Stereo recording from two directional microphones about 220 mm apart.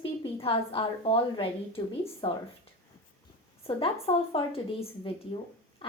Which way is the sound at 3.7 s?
25° left (ahead or behind).